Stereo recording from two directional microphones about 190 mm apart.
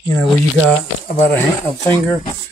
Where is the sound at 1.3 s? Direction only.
10° left (ahead or behind).